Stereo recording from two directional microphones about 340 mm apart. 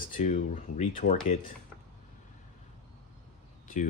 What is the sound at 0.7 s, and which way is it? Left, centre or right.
Speech, left.